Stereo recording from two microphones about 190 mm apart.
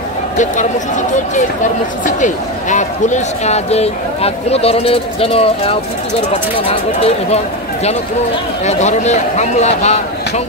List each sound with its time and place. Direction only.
2.0 s speech: 40° left (ahead or behind)